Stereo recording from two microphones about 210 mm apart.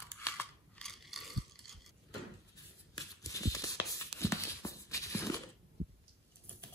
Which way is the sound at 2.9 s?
15° left (ahead or behind).